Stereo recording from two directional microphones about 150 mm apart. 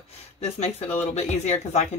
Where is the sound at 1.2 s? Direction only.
45° left (ahead or behind).